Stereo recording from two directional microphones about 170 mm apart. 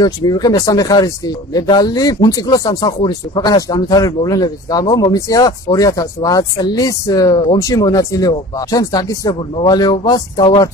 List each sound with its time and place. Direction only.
0.0 s speech: 20° left (ahead or behind)